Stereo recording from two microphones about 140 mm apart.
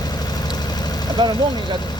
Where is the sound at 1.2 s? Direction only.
30° right (ahead or behind).